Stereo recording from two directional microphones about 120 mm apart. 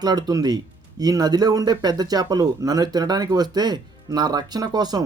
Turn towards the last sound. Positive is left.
turn(degrees=-35)  # may be behind; listen again after turning